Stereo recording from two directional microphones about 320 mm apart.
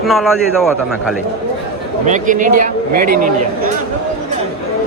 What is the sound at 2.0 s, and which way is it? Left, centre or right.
A man's voice, right.